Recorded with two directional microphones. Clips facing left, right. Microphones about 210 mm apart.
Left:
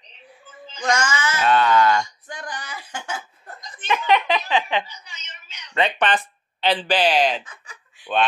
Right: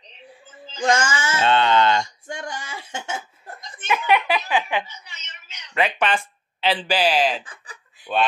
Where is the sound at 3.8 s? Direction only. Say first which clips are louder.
Even; 10° right (ahead or behind).